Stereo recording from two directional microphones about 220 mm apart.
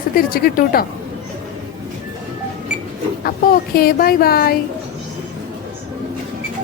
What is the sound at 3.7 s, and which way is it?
Speech, 45° left (ahead or behind).